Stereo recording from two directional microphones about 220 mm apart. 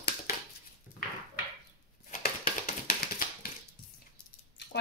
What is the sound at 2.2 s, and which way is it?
Tap, 40° left (ahead or behind).